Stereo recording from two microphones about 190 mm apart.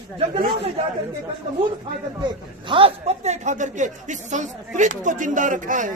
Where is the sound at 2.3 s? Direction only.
25° right (ahead or behind).